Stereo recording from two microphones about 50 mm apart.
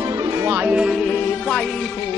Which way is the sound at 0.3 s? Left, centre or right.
Right.